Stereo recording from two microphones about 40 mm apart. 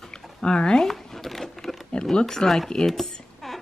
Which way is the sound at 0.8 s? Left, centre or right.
Centre.